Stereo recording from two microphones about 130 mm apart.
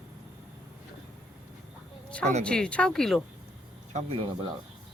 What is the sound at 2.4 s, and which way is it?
Speech, 5° left (ahead or behind).